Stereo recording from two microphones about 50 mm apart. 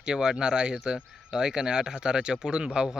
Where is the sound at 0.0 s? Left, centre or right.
Centre.